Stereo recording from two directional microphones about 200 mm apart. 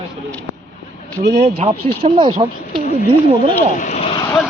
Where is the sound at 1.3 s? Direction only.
30° right (ahead or behind).